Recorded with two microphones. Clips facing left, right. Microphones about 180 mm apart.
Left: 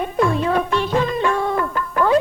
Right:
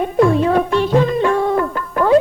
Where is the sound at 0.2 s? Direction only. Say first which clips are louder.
Right 5 dB; 35° right (ahead or behind).